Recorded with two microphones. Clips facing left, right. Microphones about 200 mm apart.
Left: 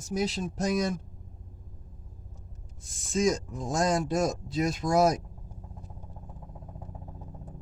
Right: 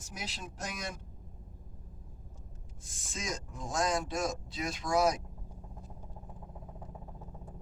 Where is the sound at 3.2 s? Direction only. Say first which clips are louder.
Left 13 dB; 45° left (ahead or behind).